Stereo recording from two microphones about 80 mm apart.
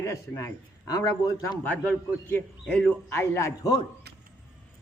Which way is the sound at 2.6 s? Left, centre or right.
Centre.